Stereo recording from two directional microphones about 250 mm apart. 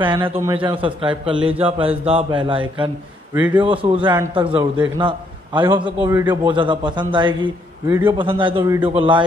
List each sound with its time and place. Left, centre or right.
0.2 s a man's voice: centre
3.3 s a man's voice: centre
3.6 s a man's voice: right